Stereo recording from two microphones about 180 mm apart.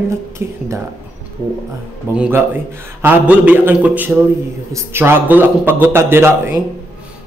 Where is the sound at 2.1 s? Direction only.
10° right (ahead or behind).